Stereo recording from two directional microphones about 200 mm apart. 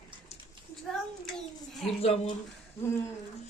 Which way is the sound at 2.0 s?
30° left (ahead or behind).